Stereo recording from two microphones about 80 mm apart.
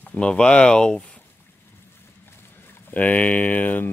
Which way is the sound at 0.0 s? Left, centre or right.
Centre.